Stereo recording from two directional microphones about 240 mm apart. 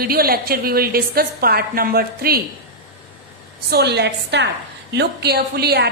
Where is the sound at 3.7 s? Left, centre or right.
Right.